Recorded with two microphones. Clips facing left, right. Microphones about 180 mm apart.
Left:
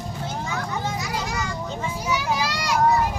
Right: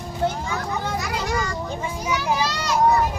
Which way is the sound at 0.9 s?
60° right (ahead or behind).